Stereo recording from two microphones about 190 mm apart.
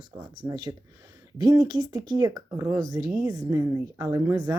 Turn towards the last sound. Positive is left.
turn(degrees=-20)  # may be behind; listen again after turning